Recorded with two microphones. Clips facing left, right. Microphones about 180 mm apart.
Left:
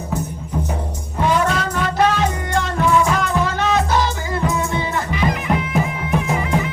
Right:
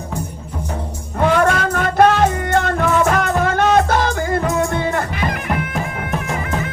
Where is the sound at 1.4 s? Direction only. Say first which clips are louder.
Right 3 dB; 55° right (ahead or behind).